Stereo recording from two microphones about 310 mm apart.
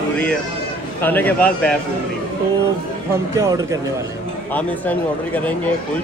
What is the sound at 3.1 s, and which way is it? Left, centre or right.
Speech, centre.